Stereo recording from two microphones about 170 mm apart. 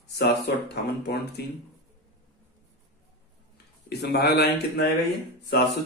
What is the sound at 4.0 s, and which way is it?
Speech, 75° left (ahead or behind).